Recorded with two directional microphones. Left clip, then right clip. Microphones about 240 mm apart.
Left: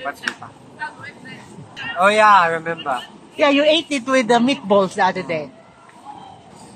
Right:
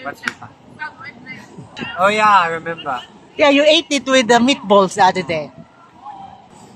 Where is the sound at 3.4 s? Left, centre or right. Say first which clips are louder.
Right 3 dB; right.